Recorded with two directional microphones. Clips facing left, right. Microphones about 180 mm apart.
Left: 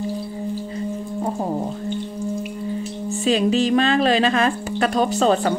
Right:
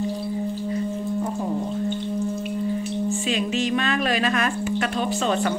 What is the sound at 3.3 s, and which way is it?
A woman's voice, 35° left (ahead or behind).